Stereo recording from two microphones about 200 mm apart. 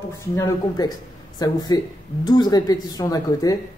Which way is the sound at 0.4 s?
20° left (ahead or behind).